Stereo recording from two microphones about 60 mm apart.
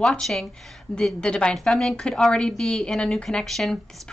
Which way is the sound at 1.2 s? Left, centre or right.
Centre.